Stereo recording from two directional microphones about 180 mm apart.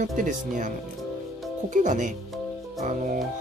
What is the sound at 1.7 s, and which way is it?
Speech, 45° right (ahead or behind).